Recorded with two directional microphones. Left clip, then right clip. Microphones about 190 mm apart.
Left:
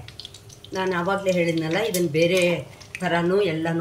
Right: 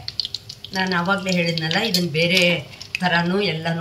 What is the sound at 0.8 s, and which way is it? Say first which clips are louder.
Speech: right 1 dB; 55° left (ahead or behind).